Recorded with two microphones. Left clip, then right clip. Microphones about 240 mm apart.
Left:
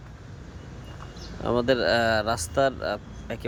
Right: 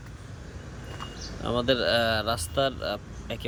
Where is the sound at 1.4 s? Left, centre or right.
Centre.